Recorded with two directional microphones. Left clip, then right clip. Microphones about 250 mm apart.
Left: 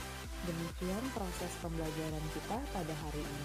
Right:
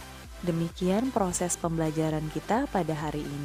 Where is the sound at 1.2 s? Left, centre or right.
Right.